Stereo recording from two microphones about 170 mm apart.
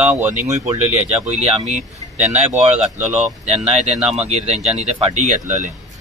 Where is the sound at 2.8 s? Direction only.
5° right (ahead or behind).